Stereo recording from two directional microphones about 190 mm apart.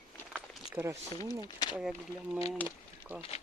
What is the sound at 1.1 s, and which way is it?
Speech, 20° left (ahead or behind).